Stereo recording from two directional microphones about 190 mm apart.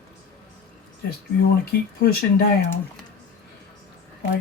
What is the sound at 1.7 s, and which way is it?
Speech, 55° left (ahead or behind).